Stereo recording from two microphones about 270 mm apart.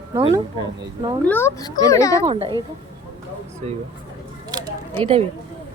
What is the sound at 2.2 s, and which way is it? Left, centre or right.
Speech, centre.